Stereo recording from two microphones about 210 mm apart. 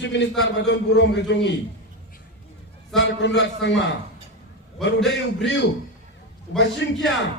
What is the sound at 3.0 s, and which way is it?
Speech, 60° left (ahead or behind).